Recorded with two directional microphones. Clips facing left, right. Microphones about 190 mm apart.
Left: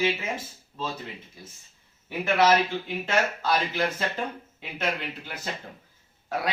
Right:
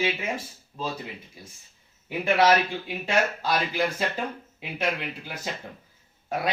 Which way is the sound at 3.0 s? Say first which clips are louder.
Right 2 dB; 10° right (ahead or behind).